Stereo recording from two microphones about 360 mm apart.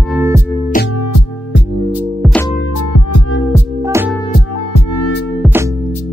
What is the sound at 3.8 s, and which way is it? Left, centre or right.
Music, centre.